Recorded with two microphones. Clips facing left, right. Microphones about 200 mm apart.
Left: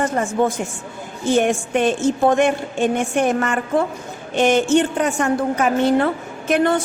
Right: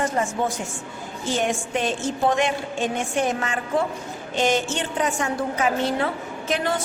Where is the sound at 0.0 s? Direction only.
55° left (ahead or behind).